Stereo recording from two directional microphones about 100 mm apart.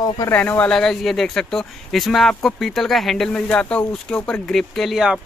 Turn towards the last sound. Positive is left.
turn(degrees=-5)  # may be behind; listen again after turning